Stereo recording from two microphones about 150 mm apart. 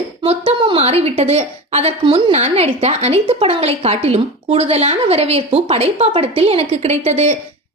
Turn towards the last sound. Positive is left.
turn(degrees=-45)  # may be behind; listen again after turning